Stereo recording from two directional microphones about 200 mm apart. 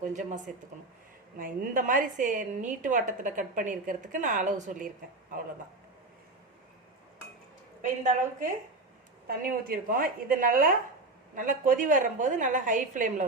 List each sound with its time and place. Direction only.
0.0 s a woman's voice: 35° right (ahead or behind)
7.8 s a woman's voice: 40° right (ahead or behind)